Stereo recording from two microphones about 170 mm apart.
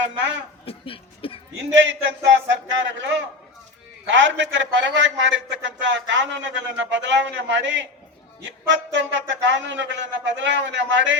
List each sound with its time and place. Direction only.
0.6 s speech: 35° left (ahead or behind)
1.7 s a man's voice: 90° right